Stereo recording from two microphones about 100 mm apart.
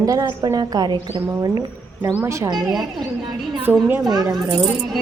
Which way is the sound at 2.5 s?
45° right (ahead or behind).